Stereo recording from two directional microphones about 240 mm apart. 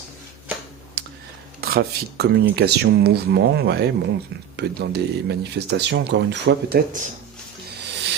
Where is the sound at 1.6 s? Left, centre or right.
Right.